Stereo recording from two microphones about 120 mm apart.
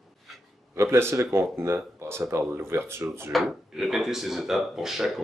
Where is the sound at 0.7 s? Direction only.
20° right (ahead or behind).